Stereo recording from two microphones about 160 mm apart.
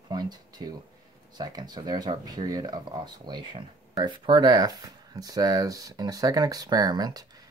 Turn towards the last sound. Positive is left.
turn(degrees=-25)  # may be behind; listen again after turning